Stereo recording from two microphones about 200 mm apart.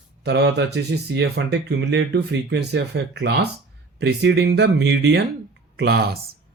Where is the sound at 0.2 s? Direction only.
55° right (ahead or behind).